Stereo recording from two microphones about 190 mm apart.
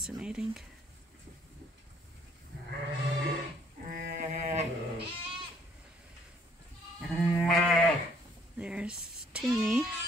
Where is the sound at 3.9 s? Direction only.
45° right (ahead or behind).